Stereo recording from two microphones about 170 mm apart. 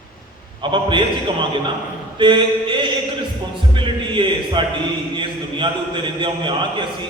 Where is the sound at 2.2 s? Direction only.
30° right (ahead or behind).